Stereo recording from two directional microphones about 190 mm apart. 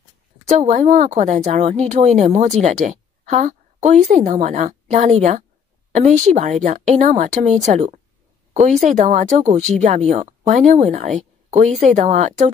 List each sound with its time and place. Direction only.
0.5 s a woman's voice: 40° right (ahead or behind)